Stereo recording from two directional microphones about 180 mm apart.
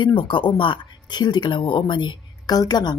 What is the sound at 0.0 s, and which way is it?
Speech, 30° left (ahead or behind).